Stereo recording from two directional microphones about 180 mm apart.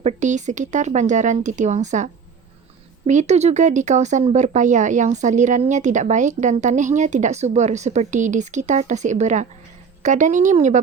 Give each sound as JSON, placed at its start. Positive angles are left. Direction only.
{"t": 0.0, "sound": "speech", "side_deg": -40}
{"t": 3.1, "sound": "speech", "side_deg": -40}